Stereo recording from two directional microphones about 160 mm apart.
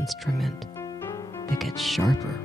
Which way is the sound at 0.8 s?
15° left (ahead or behind).